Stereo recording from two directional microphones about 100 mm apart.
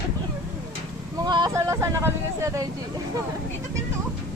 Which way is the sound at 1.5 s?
30° right (ahead or behind).